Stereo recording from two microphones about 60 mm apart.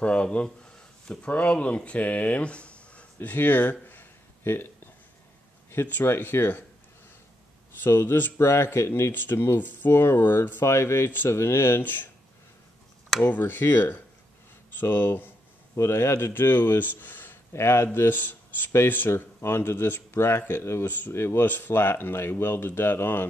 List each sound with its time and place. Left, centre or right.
0.0 s speech: centre
3.2 s speech: left
3.9 s a sound: left
5.7 s speech: left
7.8 s speech: left
9.1 s speech: left
9.9 s speech: left
13.3 s speech: left
15.7 s speech: left
17.5 s speech: left